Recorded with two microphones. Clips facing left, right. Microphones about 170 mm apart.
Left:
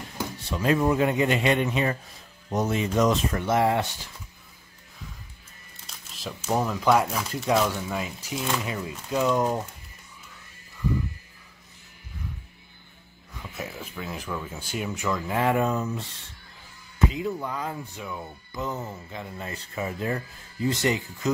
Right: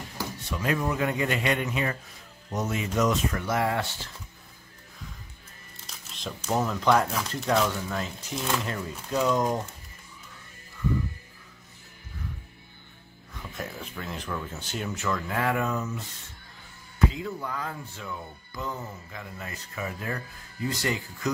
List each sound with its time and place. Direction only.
0.2 s speech: 30° left (ahead or behind); by 4.1 s 15° left (ahead or behind)
5.9 s speech: 5° left (ahead or behind)
13.6 s speech: 5° left (ahead or behind); by 16.0 s 30° left (ahead or behind)
17.1 s speech: 20° left (ahead or behind)